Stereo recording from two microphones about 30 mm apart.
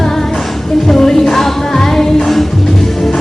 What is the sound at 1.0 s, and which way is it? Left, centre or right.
Music, centre.